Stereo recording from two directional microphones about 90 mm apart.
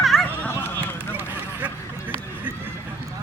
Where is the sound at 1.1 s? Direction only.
20° right (ahead or behind).